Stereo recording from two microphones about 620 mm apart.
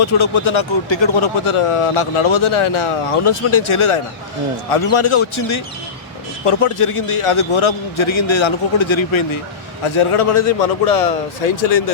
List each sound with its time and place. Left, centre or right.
0.0 s a man's voice: left